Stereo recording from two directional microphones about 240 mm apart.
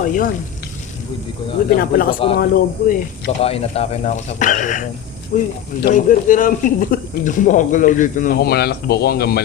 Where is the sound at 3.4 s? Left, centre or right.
Left.